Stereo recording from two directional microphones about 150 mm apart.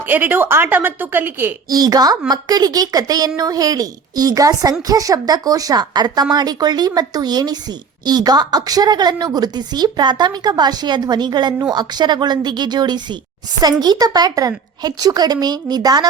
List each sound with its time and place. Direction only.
0.1 s a woman's voice: 15° right (ahead or behind)
1.7 s a woman's voice: 25° right (ahead or behind)